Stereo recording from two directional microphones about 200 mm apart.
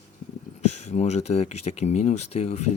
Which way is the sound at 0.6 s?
35° left (ahead or behind).